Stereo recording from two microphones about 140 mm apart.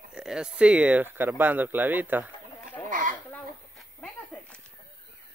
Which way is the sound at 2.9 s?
70° right (ahead or behind).